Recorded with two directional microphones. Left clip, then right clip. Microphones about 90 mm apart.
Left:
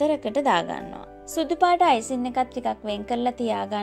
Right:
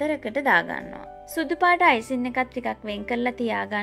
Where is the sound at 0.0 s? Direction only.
40° left (ahead or behind).